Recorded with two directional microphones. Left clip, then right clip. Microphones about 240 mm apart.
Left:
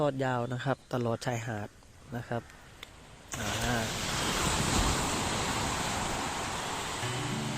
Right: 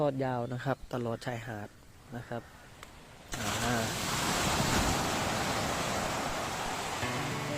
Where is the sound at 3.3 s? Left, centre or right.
Right.